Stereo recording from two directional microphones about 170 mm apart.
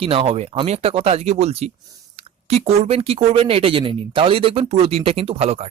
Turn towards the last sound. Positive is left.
turn(degrees=-35)  # may be behind; listen again after turning